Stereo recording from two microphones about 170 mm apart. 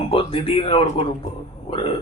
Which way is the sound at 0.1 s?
35° left (ahead or behind).